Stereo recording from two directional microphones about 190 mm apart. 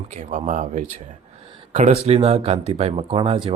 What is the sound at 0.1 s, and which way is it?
Speech, 40° right (ahead or behind).